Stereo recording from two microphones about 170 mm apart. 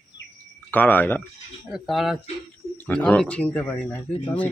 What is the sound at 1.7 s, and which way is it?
Speech, centre (ahead or behind).